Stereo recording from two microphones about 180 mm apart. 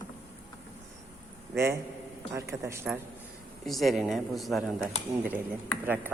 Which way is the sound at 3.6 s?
Centre (ahead or behind).